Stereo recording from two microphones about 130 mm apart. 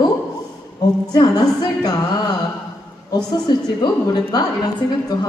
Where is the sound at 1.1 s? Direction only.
35° left (ahead or behind).